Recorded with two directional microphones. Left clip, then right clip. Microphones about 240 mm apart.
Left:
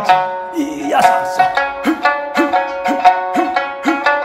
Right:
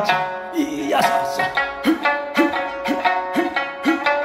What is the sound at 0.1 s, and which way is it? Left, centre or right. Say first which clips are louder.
Music: left 7 dB; centre.